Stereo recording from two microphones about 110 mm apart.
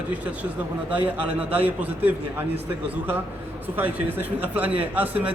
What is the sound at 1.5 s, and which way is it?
Speech, 15° right (ahead or behind).